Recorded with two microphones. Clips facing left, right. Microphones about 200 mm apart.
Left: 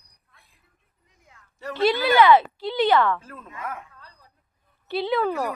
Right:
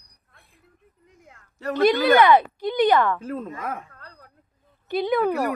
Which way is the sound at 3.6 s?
60° right (ahead or behind).